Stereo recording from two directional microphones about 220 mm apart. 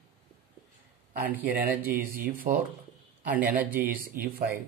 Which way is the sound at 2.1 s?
40° right (ahead or behind).